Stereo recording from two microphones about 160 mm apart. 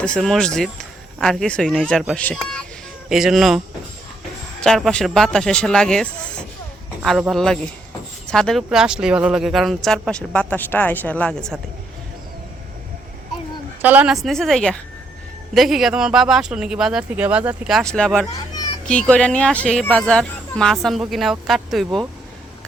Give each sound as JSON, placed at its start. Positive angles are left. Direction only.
{"t": 0.0, "sound": "speech", "side_deg": 5}
{"t": 4.6, "sound": "speech", "side_deg": 5}
{"t": 13.8, "sound": "speech", "side_deg": -10}
{"t": 18.3, "sound": "children playing", "side_deg": 25}
{"t": 18.9, "sound": "speech", "side_deg": 5}